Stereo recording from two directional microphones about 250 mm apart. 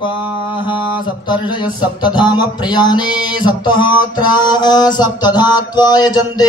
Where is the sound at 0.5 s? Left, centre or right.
Centre.